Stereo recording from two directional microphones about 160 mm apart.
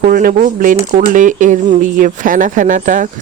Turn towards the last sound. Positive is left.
turn(degrees=-55)  # may be behind; listen again after turning